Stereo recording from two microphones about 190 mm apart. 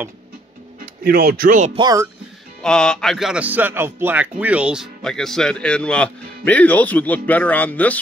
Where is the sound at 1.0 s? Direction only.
55° right (ahead or behind).